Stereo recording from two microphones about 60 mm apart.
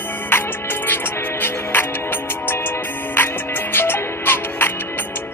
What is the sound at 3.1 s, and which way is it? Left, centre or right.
Music, left.